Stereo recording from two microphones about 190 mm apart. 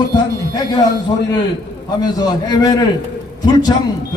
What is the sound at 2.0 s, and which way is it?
A man's voice, 20° left (ahead or behind).